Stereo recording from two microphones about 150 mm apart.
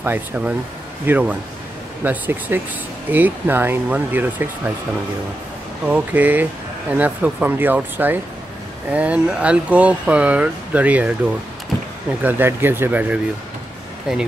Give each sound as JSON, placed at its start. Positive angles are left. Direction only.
{"t": 0.0, "sound": "speech", "side_deg": -10}
{"t": 5.9, "sound": "speech", "side_deg": -10}
{"t": 12.2, "sound": "speech", "side_deg": -10}